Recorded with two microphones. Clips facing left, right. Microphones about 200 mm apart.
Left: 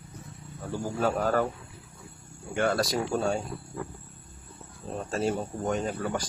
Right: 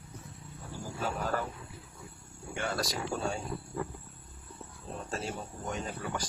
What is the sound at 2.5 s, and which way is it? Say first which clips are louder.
Speech: left 8 dB; 55° left (ahead or behind).